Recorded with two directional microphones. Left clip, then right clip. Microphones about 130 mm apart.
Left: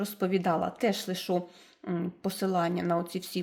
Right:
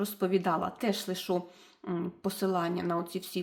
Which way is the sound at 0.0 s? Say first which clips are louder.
Even; 30° left (ahead or behind).